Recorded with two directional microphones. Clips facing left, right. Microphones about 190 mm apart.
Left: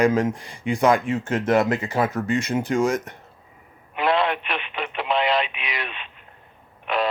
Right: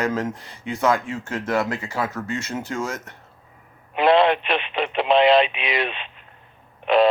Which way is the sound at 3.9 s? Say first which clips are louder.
Right 5 dB; 25° right (ahead or behind).